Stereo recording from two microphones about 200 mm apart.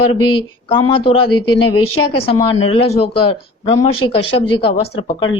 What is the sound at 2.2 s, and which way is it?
Speech, 25° left (ahead or behind).